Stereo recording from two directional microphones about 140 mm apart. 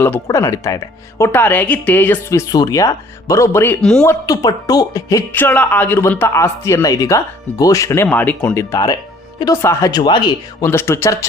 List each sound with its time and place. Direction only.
0.0 s speech: 20° left (ahead or behind)
2.5 s speech: 25° left (ahead or behind); by 4.0 s 5° left (ahead or behind)
4.0 s speech: 25° left (ahead or behind)
8.0 s speech: 10° left (ahead or behind); by 10.3 s 35° left (ahead or behind)
10.6 s speech: 20° left (ahead or behind)